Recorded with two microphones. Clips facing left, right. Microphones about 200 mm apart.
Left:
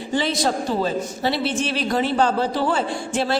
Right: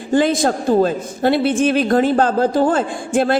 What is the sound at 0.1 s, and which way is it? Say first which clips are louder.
A woman's voice: right 7 dB; 50° right (ahead or behind).